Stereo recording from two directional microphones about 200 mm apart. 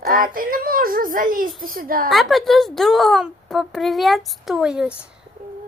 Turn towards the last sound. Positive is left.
turn(degrees=-5)  # may be behind; listen again after turning